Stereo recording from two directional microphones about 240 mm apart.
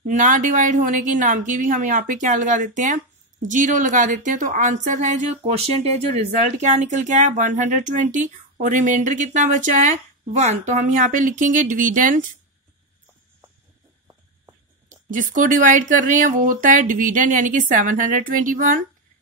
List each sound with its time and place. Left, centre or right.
0.0 s speech: right
14.9 s speech: right